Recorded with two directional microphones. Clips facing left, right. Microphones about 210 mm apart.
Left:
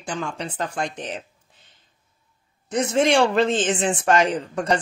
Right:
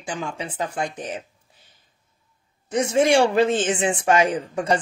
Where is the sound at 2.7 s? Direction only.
10° right (ahead or behind).